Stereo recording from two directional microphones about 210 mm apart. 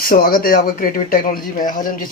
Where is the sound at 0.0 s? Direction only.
45° left (ahead or behind).